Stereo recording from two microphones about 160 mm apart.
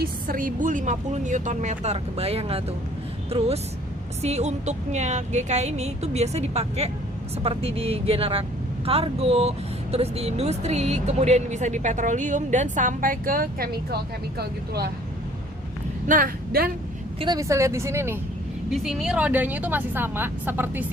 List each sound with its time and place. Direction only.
0.0 s a woman's voice: 60° right (ahead or behind); by 14.8 s 80° right
16.0 s speech: 60° right (ahead or behind)
17.2 s speech: 25° right (ahead or behind)
18.7 s speech: centre (ahead or behind)